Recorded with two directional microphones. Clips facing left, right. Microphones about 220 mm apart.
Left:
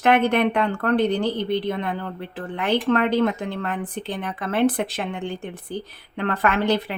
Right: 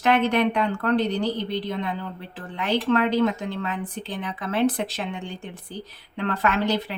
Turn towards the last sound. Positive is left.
turn(degrees=55)  # may be behind; listen again after turning